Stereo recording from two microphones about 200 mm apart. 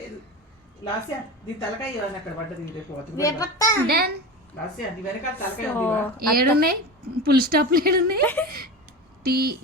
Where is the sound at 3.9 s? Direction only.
50° right (ahead or behind).